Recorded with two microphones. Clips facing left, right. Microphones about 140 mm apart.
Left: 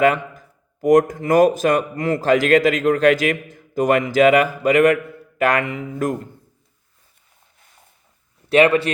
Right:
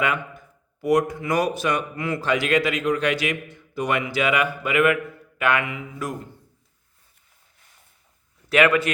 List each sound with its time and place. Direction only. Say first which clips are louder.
0.8 s speech: left 6 dB; 45° left (ahead or behind)
8.4 s speech: left 4 dB; 30° left (ahead or behind)